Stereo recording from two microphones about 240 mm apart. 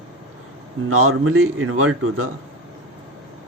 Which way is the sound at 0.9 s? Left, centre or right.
Right.